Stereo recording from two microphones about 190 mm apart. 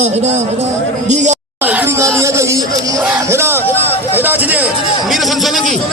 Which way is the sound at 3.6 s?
10° left (ahead or behind).